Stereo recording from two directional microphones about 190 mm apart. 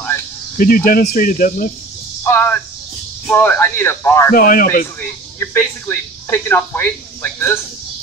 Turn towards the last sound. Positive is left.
turn(degrees=10)  # may be behind; listen again after turning